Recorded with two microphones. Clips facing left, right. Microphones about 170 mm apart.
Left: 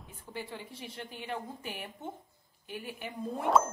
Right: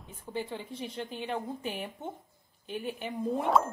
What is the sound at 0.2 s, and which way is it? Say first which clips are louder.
A woman's voice: right 5 dB; 20° right (ahead or behind).